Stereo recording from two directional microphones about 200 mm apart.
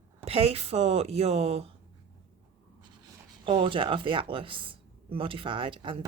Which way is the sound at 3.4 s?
25° right (ahead or behind).